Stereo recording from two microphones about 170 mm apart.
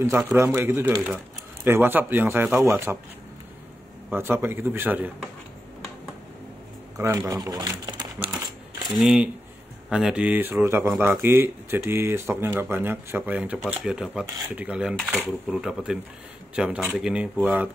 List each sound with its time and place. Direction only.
0.0 s speech: 15° right (ahead or behind)
4.1 s speech: 15° right (ahead or behind)
7.0 s speech: 20° right (ahead or behind)
8.8 s speech: 5° right (ahead or behind)